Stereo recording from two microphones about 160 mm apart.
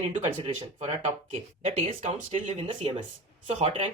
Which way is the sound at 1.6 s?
40° right (ahead or behind).